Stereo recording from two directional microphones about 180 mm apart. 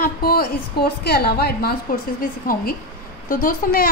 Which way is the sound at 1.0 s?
65° left (ahead or behind).